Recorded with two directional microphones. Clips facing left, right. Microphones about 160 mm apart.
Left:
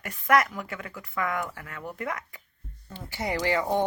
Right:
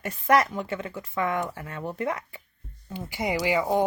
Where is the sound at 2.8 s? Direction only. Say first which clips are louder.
Right 3 dB; 10° right (ahead or behind).